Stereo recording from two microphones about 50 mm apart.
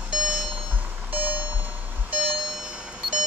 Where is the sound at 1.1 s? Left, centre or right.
Right.